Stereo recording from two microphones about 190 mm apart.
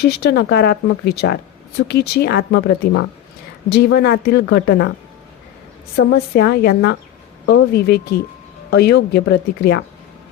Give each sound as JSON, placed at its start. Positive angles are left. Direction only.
{"t": 0.0, "sound": "speech", "side_deg": 60}
{"t": 6.0, "sound": "speech", "side_deg": 55}